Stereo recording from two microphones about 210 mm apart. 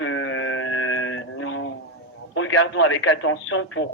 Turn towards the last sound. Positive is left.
turn(degrees=60)  # may be behind; listen again after turning